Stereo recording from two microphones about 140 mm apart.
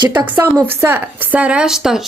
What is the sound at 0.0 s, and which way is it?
Speech, 30° right (ahead or behind).